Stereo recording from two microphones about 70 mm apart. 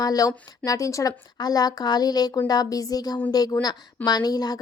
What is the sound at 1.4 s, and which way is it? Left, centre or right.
A woman's voice, left.